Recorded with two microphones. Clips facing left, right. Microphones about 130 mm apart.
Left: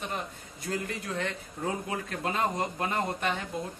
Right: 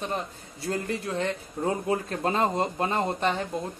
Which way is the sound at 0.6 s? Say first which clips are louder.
Right 4 dB; 30° right (ahead or behind).